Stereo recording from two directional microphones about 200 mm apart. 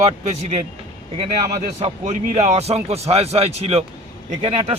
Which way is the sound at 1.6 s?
35° right (ahead or behind).